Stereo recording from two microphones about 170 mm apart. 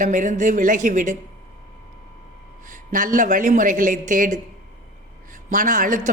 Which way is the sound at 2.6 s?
50° right (ahead or behind).